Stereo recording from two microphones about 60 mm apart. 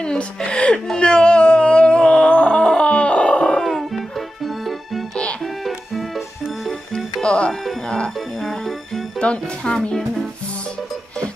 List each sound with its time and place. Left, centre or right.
0.0 s speech: centre
0.8 s music: centre
3.6 s music: centre
7.2 s music: centre
8.4 s music: centre
9.2 s speech: centre